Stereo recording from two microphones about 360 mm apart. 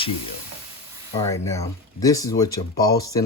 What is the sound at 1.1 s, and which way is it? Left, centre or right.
Speech, centre.